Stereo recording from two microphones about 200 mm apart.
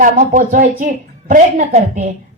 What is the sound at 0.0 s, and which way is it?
A woman's voice, 40° right (ahead or behind).